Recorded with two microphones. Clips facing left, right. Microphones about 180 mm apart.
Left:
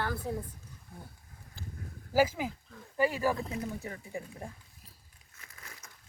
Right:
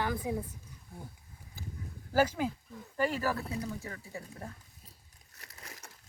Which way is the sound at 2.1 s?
10° left (ahead or behind).